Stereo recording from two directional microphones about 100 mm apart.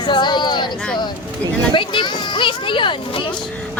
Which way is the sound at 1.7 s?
55° left (ahead or behind).